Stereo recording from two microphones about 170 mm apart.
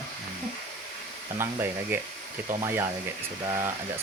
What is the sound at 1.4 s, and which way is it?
Speech, 10° right (ahead or behind).